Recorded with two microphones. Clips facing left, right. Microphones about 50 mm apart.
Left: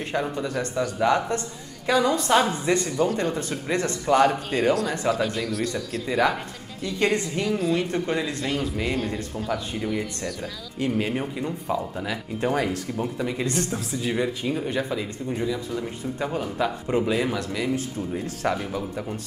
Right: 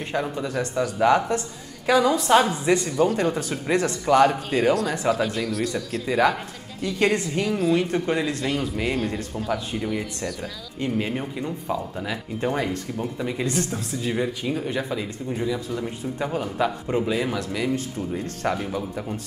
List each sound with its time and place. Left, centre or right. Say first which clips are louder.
0.1 s a woman's voice: right 1 dB; centre